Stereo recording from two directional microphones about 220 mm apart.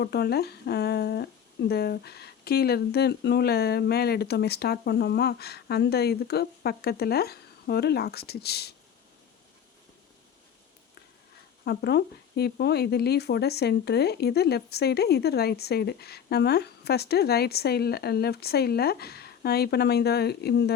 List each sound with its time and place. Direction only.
0.0 s speech: 45° left (ahead or behind)
11.6 s speech: 45° left (ahead or behind)